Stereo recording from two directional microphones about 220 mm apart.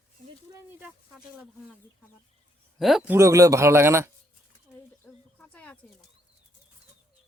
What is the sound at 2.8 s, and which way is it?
Speech, centre (ahead or behind).